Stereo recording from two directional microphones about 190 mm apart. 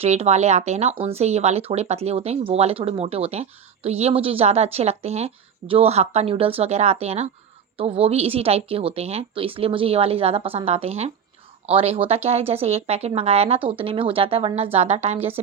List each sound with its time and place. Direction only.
0.0 s a woman's voice: 35° right (ahead or behind)